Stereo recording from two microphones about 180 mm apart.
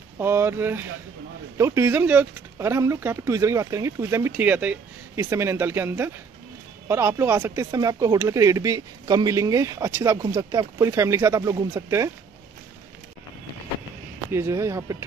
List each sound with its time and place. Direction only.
0.2 s speech: 15° right (ahead or behind)
14.3 s speech: 15° right (ahead or behind)